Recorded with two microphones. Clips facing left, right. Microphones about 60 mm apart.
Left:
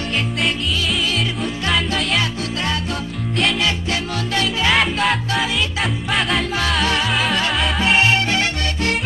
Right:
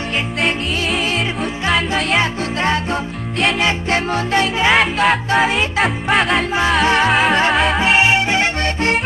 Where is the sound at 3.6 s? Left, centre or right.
Right.